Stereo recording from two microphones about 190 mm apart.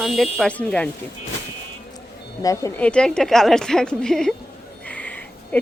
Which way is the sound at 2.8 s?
5° left (ahead or behind).